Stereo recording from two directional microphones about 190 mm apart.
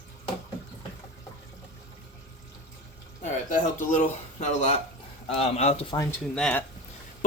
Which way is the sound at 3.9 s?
40° left (ahead or behind).